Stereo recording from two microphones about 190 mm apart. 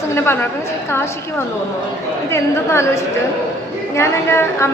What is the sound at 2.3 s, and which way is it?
A woman's voice, 15° left (ahead or behind).